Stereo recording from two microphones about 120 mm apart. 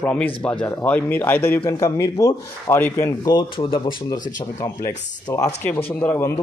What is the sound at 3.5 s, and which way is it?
Speech, 45° left (ahead or behind).